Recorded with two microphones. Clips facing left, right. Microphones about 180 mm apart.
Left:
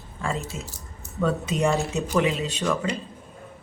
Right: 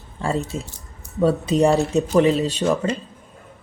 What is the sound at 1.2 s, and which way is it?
Speech, 35° right (ahead or behind).